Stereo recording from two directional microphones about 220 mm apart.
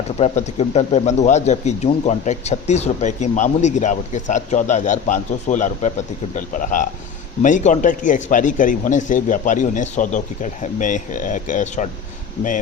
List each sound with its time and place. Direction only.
0.2 s speech: 30° left (ahead or behind)